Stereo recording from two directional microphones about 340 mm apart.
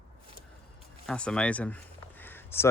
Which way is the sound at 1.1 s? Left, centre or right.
Centre.